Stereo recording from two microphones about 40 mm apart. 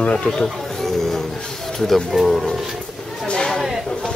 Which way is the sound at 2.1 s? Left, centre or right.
Centre.